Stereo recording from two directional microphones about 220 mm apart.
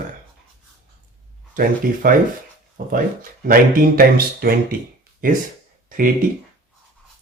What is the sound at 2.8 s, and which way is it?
Speech, 40° right (ahead or behind).